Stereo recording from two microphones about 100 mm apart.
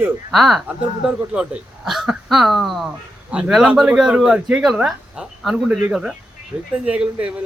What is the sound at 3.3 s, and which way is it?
Speech, 10° right (ahead or behind).